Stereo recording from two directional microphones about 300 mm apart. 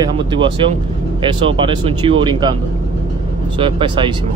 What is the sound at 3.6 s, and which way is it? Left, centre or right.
Speech, centre.